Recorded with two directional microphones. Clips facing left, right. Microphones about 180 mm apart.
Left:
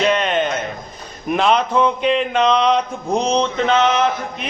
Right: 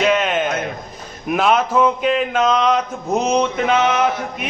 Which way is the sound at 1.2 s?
5° right (ahead or behind).